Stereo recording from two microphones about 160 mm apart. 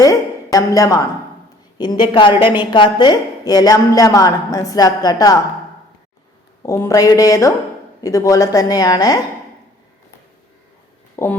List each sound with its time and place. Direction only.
0.0 s a woman's voice: 20° left (ahead or behind)
6.6 s a woman's voice: 20° left (ahead or behind)
11.2 s speech: 15° left (ahead or behind)